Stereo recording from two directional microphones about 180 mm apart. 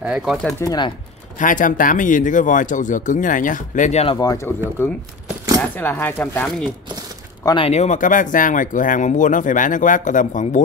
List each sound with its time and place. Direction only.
0.0 s speech: 5° right (ahead or behind)
0.6 s speech: 20° left (ahead or behind)
1.4 s speech: 45° left (ahead or behind)
4.2 s speech: 20° left (ahead or behind)
5.8 s speech: 10° left (ahead or behind)
7.4 s speech: 30° left (ahead or behind)